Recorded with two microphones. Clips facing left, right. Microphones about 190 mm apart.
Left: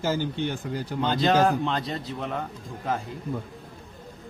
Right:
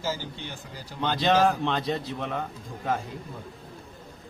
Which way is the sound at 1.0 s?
Centre (ahead or behind).